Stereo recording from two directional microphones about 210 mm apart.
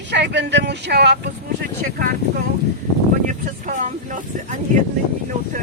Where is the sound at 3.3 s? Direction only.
35° right (ahead or behind).